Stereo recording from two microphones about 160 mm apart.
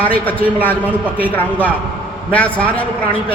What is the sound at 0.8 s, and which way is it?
Speech, 10° right (ahead or behind).